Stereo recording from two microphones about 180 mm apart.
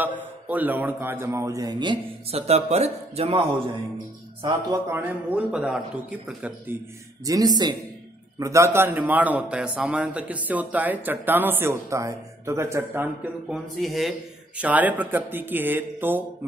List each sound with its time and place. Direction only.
0.5 s a man's voice: 10° right (ahead or behind); by 3.6 s 30° right (ahead or behind)
4.8 s a man's voice: 10° right (ahead or behind)
7.2 s a man's voice: 20° right (ahead or behind)
13.7 s a man's voice: centre (ahead or behind)